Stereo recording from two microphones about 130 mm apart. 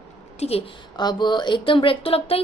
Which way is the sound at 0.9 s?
35° left (ahead or behind).